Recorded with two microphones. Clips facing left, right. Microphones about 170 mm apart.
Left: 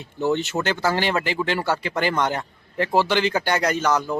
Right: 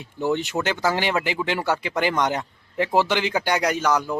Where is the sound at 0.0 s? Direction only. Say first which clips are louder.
Left 1 dB; 10° right (ahead or behind).